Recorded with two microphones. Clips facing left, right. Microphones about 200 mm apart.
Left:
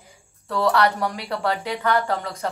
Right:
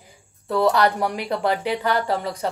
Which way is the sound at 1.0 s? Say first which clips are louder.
Right 3 dB; 10° right (ahead or behind).